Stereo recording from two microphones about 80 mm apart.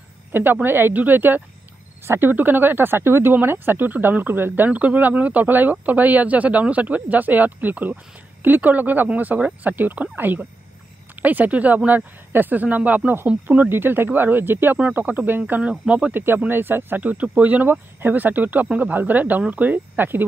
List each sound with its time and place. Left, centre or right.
0.3 s speech: right
16.2 s speech: right